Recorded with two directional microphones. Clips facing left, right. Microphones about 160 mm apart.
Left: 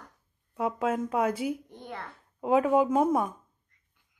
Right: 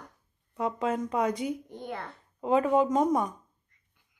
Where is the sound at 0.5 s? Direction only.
5° left (ahead or behind).